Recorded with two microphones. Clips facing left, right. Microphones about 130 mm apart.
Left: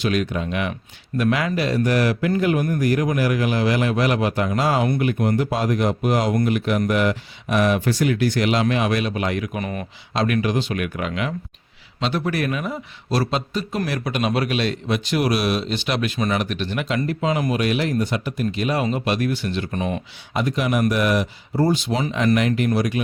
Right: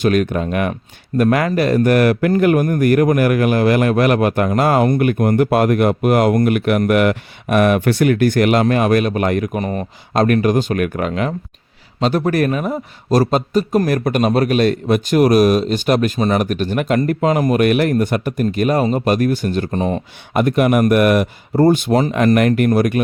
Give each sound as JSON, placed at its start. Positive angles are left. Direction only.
{"t": 0.0, "sound": "a man's voice", "side_deg": -50}
{"t": 10.2, "sound": "a man's voice", "side_deg": -45}
{"t": 20.3, "sound": "a man's voice", "side_deg": -55}